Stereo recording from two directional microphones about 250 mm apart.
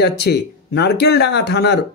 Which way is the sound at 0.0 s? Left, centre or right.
Left.